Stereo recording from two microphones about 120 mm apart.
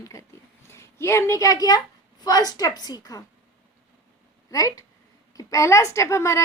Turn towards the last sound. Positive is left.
turn(degrees=25)  # may be behind; listen again after turning